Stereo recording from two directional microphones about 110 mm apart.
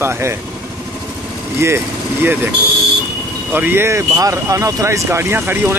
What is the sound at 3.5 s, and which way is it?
Speech, 20° right (ahead or behind).